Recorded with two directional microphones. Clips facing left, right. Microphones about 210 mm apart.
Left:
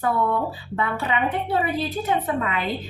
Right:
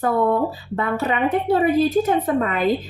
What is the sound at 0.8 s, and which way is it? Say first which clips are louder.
A woman's voice: right 4 dB; 45° right (ahead or behind).